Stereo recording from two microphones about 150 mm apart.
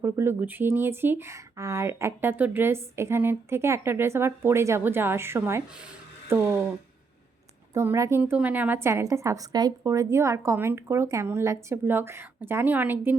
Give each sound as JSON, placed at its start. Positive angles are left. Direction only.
{"t": 0.0, "sound": "speech", "side_deg": -15}
{"t": 7.7, "sound": "a woman's voice", "side_deg": -20}